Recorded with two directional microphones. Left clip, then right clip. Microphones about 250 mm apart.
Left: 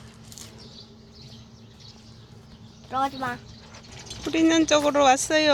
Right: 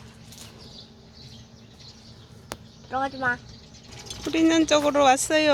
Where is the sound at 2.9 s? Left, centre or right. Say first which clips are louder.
Right 1 dB; left.